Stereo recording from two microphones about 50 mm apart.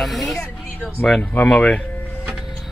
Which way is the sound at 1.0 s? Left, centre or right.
Centre.